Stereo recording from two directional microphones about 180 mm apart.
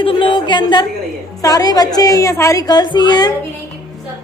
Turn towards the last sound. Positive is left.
turn(degrees=25)  # may be behind; listen again after turning